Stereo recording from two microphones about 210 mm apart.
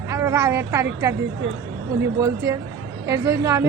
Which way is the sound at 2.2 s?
15° right (ahead or behind).